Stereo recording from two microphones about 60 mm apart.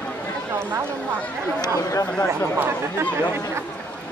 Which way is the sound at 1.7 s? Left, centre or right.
Left.